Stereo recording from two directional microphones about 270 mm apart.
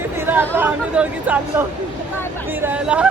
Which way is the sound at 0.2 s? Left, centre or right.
Centre.